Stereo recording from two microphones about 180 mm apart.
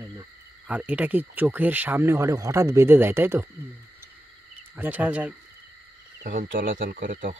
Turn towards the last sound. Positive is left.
turn(degrees=-50)  # may be behind; listen again after turning